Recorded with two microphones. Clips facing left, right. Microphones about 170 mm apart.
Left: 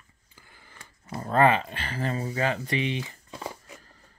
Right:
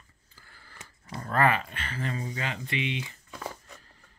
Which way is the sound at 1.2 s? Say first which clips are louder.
Left 4 dB; 25° left (ahead or behind).